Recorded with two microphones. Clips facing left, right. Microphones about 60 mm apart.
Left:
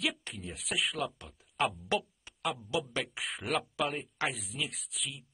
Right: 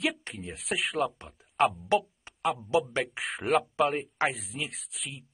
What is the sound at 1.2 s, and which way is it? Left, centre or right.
A man's voice, right.